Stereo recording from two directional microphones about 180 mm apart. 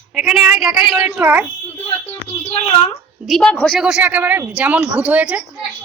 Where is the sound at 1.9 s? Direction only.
35° left (ahead or behind).